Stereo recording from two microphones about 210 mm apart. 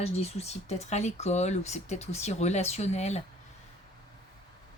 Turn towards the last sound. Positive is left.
turn(degrees=30)  # may be behind; listen again after turning